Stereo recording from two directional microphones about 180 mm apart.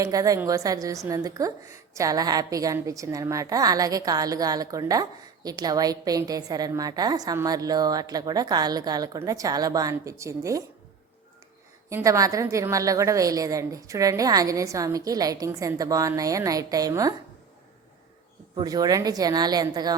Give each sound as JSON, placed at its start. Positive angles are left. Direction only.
{"t": 0.0, "sound": "a woman's voice", "side_deg": -20}
{"t": 11.9, "sound": "a woman's voice", "side_deg": -15}
{"t": 18.5, "sound": "a woman's voice", "side_deg": -20}